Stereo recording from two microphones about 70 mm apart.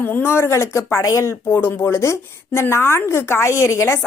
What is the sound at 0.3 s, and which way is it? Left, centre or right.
A woman's voice, left.